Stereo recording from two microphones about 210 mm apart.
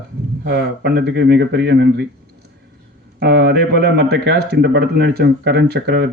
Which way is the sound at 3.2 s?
55° right (ahead or behind).